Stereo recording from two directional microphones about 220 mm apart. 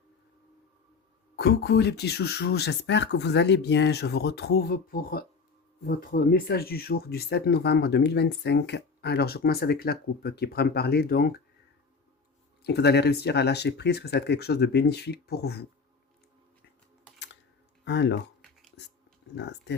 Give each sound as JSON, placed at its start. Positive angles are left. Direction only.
{"t": 1.4, "sound": "speech", "side_deg": 50}
{"t": 12.6, "sound": "speech", "side_deg": 50}
{"t": 17.8, "sound": "speech", "side_deg": 50}
{"t": 19.4, "sound": "speech", "side_deg": 50}